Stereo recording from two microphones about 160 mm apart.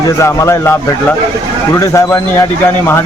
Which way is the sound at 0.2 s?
15° left (ahead or behind).